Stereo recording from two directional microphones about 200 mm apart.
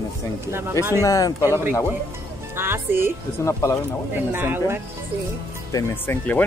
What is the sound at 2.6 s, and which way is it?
Speech, 10° right (ahead or behind).